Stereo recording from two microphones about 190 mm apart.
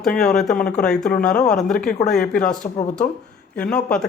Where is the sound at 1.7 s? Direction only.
45° left (ahead or behind).